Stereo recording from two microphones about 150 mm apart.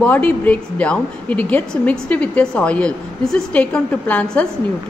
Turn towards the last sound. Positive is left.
turn(degrees=10)  # may be behind; listen again after turning